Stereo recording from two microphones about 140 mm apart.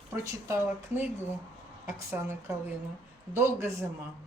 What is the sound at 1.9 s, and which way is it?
A man's voice, 20° right (ahead or behind).